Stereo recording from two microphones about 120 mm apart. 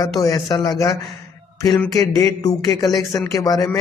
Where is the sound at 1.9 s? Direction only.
30° left (ahead or behind).